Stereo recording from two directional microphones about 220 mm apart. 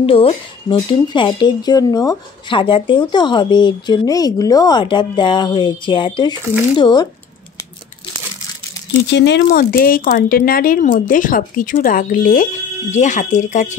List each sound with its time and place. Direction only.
0.0 s speech: 25° left (ahead or behind)
9.1 s speech: 50° left (ahead or behind)
9.5 s speech: 40° left (ahead or behind)